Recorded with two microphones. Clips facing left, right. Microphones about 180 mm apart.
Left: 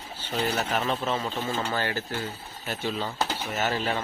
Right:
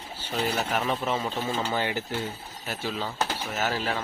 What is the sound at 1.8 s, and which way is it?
Speech, 15° right (ahead or behind).